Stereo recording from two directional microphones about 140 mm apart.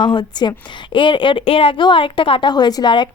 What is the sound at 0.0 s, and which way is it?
A woman's voice, 30° left (ahead or behind).